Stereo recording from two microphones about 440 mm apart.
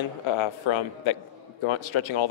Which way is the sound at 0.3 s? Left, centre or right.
Left.